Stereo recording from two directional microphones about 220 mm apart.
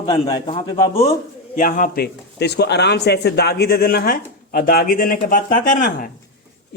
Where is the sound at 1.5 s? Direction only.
40° left (ahead or behind).